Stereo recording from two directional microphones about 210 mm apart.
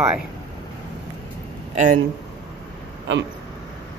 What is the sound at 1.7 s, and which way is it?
Speech, 35° right (ahead or behind).